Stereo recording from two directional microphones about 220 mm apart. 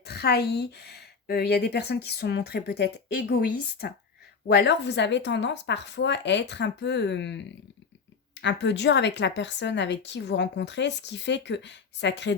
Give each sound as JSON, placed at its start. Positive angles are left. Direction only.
{"t": 0.0, "sound": "a woman's voice", "side_deg": 45}